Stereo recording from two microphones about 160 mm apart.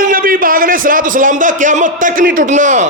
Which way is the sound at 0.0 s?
60° right (ahead or behind).